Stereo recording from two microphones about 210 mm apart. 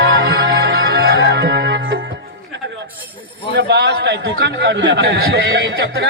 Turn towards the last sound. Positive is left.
turn(degrees=-55)  # may be behind; listen again after turning